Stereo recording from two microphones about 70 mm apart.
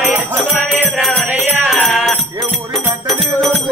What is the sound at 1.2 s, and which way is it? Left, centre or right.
Music, right.